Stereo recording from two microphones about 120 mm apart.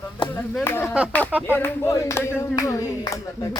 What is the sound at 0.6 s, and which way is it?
Speech, 20° left (ahead or behind).